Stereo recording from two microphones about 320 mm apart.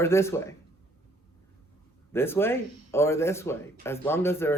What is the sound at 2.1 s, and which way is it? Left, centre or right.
Speech, centre.